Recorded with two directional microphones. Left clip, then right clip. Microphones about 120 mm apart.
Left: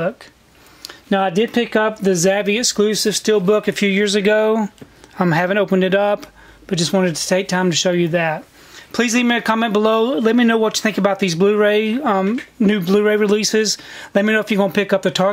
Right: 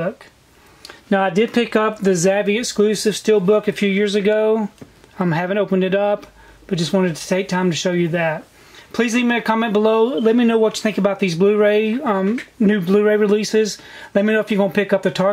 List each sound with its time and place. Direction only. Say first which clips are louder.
0.8 s speech: even; 20° left (ahead or behind)